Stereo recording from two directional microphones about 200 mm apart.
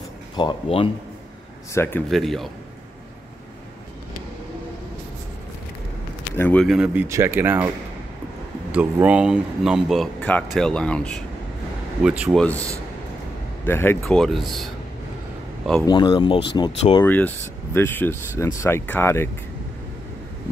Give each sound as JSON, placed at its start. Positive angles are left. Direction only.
{"t": 0.4, "sound": "speech", "side_deg": 25}
{"t": 1.7, "sound": "speech", "side_deg": 10}
{"t": 6.3, "sound": "speech", "side_deg": 10}
{"t": 8.7, "sound": "speech", "side_deg": -5}
{"t": 13.7, "sound": "speech", "side_deg": 10}
{"t": 15.9, "sound": "speech", "side_deg": 25}
{"t": 17.0, "sound": "speech", "side_deg": 10}